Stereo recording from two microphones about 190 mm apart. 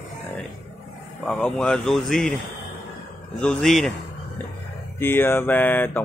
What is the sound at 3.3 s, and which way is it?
Speech, 5° left (ahead or behind).